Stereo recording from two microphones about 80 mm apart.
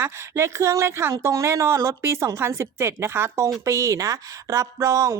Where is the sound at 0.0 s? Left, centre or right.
Right.